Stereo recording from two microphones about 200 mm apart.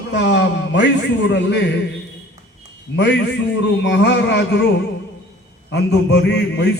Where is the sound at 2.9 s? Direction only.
60° left (ahead or behind).